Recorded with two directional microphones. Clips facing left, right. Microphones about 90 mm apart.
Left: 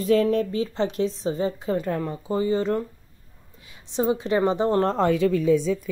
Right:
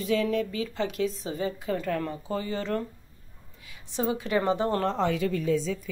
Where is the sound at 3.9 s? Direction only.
25° left (ahead or behind).